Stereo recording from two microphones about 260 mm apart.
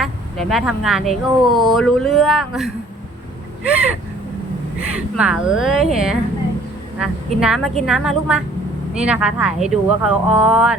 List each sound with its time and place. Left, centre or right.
0.0 s speech: centre
4.9 s speech: centre